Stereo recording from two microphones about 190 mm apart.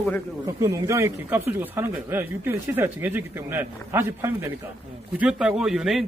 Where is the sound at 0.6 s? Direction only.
15° right (ahead or behind).